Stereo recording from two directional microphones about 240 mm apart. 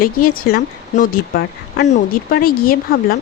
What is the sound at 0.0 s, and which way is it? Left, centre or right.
A woman's voice, left.